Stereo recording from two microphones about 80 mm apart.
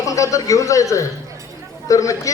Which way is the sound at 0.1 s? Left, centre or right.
Left.